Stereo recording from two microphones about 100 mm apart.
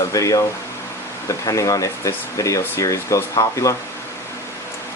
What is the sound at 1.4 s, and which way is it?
Speech, 35° left (ahead or behind).